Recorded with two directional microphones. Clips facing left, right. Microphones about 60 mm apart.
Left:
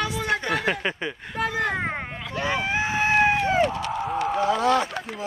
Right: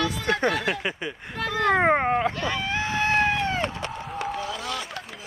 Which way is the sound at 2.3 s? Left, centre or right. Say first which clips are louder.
Left 2 dB; centre.